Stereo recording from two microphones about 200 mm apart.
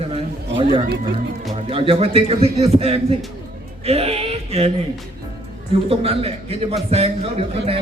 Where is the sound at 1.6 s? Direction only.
25° right (ahead or behind).